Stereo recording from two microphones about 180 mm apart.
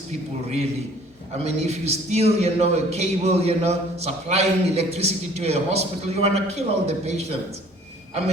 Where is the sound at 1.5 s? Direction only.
35° right (ahead or behind).